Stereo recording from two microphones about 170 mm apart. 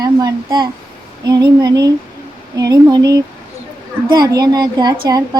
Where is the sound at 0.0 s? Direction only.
20° right (ahead or behind).